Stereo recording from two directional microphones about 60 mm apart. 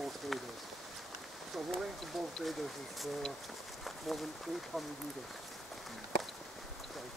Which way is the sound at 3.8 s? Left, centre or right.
Centre.